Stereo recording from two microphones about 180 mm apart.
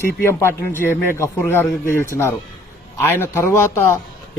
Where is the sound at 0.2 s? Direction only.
15° left (ahead or behind).